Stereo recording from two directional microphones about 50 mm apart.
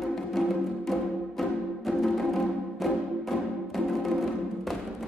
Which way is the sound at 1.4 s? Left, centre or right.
Centre.